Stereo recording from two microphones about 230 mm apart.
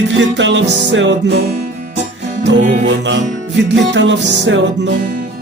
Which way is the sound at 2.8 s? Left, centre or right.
Right.